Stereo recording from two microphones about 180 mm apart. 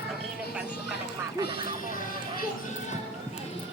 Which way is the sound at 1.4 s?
60° left (ahead or behind).